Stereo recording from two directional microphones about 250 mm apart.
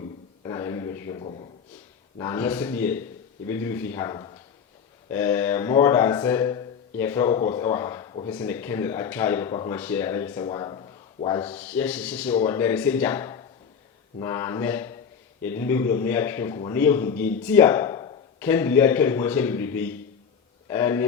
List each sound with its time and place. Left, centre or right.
0.4 s a sound: centre
1.2 s a man's voice: left
2.1 s a man's voice: centre
11.4 s a man's voice: centre